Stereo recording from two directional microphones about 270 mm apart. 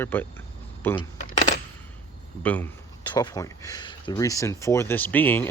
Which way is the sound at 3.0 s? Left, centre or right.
Centre.